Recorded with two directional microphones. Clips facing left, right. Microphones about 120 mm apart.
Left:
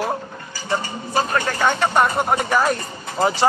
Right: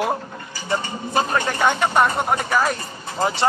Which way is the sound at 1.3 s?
10° right (ahead or behind).